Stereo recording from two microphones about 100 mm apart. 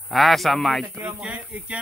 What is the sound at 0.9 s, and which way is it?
Speech, 15° right (ahead or behind).